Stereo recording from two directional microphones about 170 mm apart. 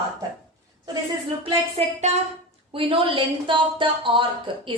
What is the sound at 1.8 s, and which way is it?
Speech, 35° right (ahead or behind).